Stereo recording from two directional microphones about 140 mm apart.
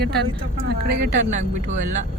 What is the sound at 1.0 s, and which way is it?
Speech, 60° right (ahead or behind).